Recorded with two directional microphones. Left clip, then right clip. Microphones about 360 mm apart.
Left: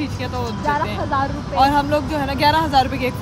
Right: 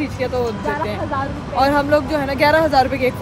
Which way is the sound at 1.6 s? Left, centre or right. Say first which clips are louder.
Right 1 dB; centre.